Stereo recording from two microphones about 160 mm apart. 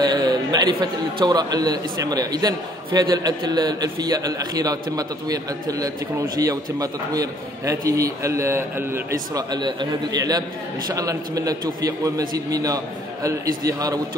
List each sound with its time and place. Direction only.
0.0 s a sound: 25° right (ahead or behind)
1.2 s a man's voice: 25° right (ahead or behind)
9.5 s a man's voice: 30° right (ahead or behind)